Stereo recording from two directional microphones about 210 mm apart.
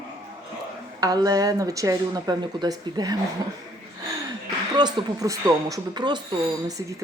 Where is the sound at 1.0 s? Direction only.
15° right (ahead or behind).